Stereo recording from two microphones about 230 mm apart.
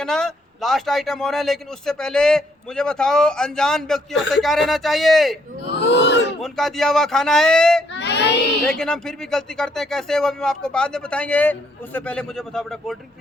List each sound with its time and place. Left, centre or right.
0.0 s speech: centre
5.8 s a sound: left
6.4 s speech: centre
7.9 s child singing: left
8.8 s speech: centre